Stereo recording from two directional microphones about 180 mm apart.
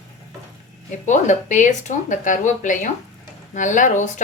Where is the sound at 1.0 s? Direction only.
40° left (ahead or behind).